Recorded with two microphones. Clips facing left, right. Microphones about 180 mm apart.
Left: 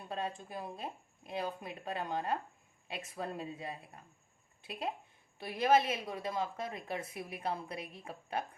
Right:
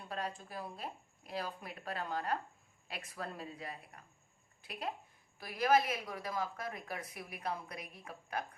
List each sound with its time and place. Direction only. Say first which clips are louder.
0.1 s speech: left 2 dB; 25° left (ahead or behind)